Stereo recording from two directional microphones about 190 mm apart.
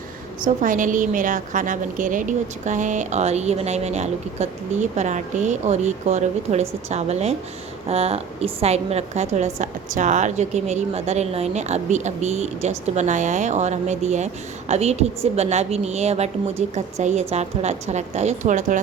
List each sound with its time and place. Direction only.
0.4 s a woman's voice: 45° right (ahead or behind)